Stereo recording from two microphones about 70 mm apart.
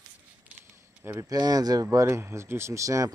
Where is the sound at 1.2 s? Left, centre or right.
Right.